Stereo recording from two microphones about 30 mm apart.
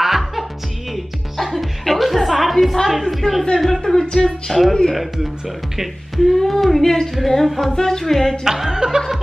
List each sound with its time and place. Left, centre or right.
0.0 s music: centre
0.9 s music: centre
2.9 s a sound: centre
3.5 s music: centre
3.9 s a sound: left
4.5 s music: centre
4.9 s speech: centre
6.1 s music: centre
6.8 s a sound: centre
7.4 s music: centre
7.7 s music: centre
8.0 s a sound: centre
8.5 s speech: centre
8.7 s chuckle: right